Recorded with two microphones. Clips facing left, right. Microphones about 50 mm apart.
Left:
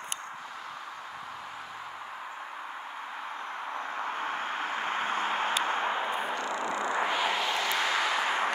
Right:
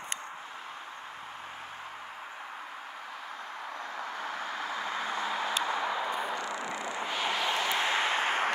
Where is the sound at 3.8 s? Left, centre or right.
Left.